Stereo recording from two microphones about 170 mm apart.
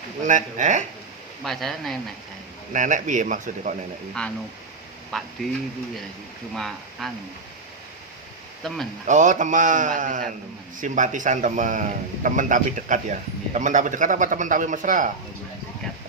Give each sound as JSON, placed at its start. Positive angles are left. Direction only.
{"t": 0.3, "sound": "a man's voice", "side_deg": -45}
{"t": 1.5, "sound": "speech", "side_deg": 0}
{"t": 2.7, "sound": "a man's voice", "side_deg": -50}
{"t": 4.2, "sound": "speech", "side_deg": 5}
{"t": 6.5, "sound": "speech", "side_deg": 0}
{"t": 8.6, "sound": "speech", "side_deg": 0}
{"t": 9.0, "sound": "a man's voice", "side_deg": -45}